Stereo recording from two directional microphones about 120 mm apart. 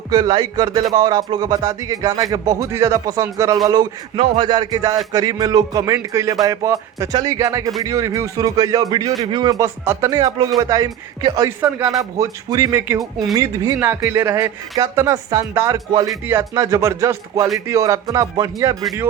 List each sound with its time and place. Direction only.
0.1 s speech: 40° right (ahead or behind)
4.2 s speech: 40° right (ahead or behind)
9.8 s speech: 25° right (ahead or behind)
13.0 s speech: centre (ahead or behind)
13.3 s speech: 30° right (ahead or behind)
13.7 s speech: 15° right (ahead or behind)